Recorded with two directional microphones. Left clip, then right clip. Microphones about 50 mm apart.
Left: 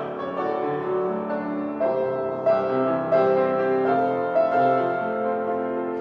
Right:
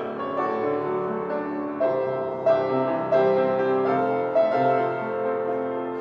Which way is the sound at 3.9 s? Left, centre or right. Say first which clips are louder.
Left 1 dB; centre.